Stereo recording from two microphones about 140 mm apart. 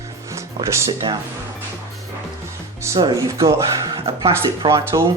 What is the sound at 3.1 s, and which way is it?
Speech, 25° right (ahead or behind).